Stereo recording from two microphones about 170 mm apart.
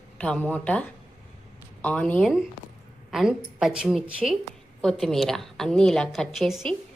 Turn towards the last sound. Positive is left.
turn(degrees=0)  # may be behind; listen again after turning